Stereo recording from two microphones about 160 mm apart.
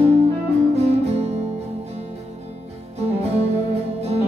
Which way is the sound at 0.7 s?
40° right (ahead or behind).